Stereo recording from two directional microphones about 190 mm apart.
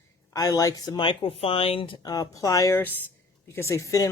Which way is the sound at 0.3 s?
20° left (ahead or behind).